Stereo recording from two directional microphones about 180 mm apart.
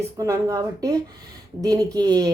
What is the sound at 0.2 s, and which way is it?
Speech, 20° right (ahead or behind).